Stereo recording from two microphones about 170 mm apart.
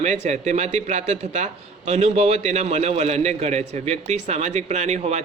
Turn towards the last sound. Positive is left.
turn(degrees=-40)  # may be behind; listen again after turning